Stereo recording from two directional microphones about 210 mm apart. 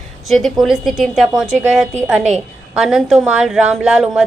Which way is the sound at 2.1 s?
30° right (ahead or behind).